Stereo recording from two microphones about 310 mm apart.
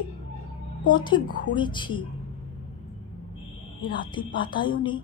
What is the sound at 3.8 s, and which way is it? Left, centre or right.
A woman's voice, centre.